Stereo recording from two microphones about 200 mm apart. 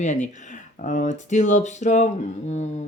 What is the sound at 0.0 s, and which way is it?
Speech, 35° left (ahead or behind).